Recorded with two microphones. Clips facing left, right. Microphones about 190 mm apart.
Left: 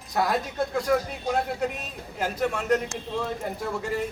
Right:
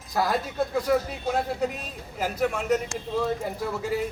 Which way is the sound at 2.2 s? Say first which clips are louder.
Right 1 dB; 5° right (ahead or behind).